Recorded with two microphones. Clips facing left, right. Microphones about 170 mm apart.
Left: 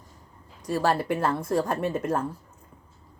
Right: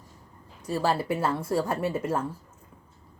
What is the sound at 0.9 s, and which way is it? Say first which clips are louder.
Speech: left 1 dB; 5° right (ahead or behind).